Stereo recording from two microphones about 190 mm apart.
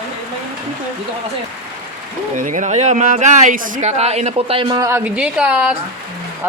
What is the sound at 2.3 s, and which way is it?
Speech, 40° right (ahead or behind).